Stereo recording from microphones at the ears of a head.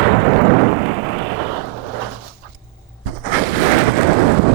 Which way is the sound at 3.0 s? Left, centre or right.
Right.